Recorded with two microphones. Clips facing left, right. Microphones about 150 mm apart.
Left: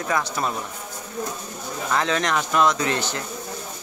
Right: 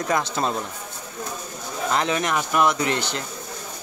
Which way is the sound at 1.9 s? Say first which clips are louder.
Left 1 dB; 15° right (ahead or behind).